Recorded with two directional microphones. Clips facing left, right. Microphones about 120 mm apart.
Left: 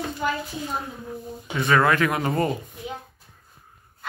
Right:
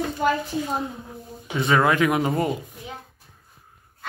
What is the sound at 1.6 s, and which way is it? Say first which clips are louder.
Speech: right 1 dB; 15° right (ahead or behind).